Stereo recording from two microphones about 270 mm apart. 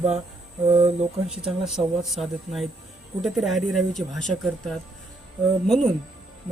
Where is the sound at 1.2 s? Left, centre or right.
Centre.